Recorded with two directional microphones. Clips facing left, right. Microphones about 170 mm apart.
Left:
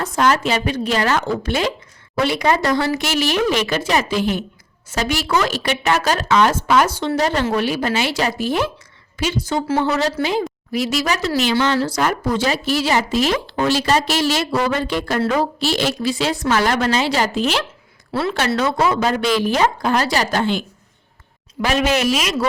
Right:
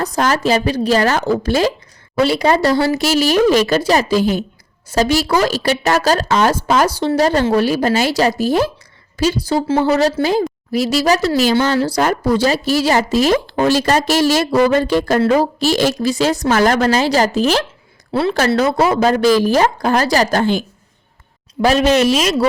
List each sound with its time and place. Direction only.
0.0 s speech: 40° right (ahead or behind)
18.1 s speech: 30° right (ahead or behind)
21.6 s speech: 25° right (ahead or behind)